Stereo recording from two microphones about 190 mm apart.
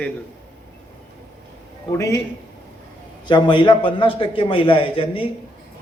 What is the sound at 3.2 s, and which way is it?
A man's voice, 25° left (ahead or behind).